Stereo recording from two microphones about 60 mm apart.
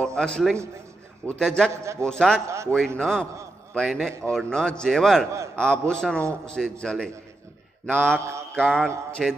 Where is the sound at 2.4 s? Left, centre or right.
Right.